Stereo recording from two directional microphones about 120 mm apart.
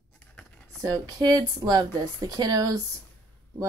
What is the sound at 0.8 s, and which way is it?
Speech, 30° right (ahead or behind).